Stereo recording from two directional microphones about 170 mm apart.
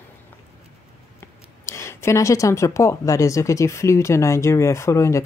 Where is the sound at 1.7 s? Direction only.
15° left (ahead or behind).